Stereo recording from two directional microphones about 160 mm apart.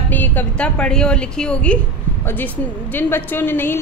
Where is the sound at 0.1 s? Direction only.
10° left (ahead or behind).